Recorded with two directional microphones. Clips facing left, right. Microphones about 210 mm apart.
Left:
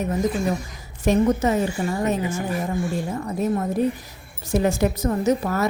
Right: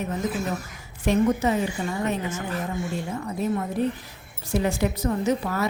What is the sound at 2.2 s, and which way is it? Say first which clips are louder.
Speech: left 4 dB; 10° left (ahead or behind).